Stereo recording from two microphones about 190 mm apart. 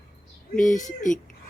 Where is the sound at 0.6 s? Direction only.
40° left (ahead or behind).